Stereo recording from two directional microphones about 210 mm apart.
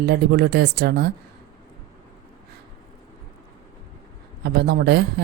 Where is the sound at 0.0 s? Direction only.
50° right (ahead or behind).